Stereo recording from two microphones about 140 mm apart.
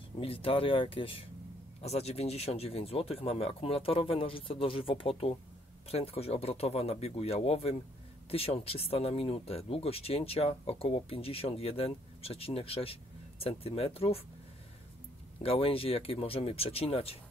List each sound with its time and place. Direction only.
0.2 s speech: 40° left (ahead or behind)
15.4 s speech: 40° left (ahead or behind)